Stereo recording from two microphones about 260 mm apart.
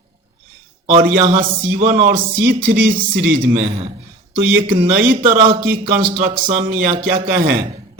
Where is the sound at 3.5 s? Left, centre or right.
Right.